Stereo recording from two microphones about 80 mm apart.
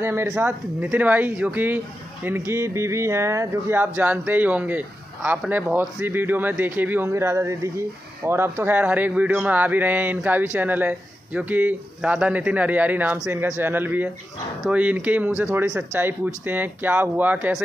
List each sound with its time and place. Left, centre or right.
0.0 s speech: right
0.9 s speech: right
7.1 s speech: right